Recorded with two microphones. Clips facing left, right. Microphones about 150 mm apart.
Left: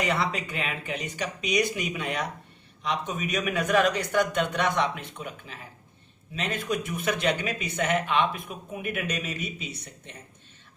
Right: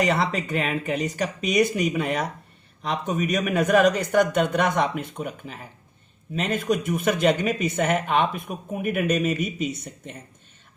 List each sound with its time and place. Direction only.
0.0 s speech: 45° right (ahead or behind)